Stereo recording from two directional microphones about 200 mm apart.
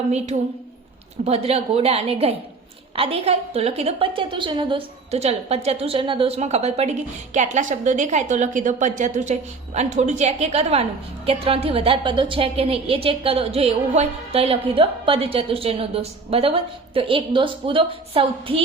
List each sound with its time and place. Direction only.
1.2 s a woman's voice: 30° right (ahead or behind)